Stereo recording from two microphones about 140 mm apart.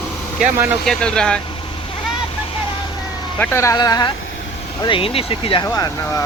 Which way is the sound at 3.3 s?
10° left (ahead or behind).